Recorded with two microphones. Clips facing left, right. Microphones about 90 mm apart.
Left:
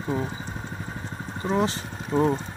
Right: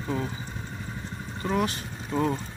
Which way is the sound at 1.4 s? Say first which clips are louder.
Left 2 dB; 25° left (ahead or behind).